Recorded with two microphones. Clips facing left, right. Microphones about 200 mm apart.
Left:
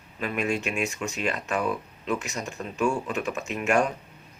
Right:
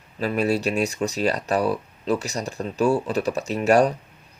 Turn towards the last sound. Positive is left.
turn(degrees=-35)  # may be behind; listen again after turning